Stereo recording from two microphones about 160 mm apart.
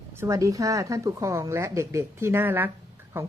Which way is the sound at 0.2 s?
20° right (ahead or behind).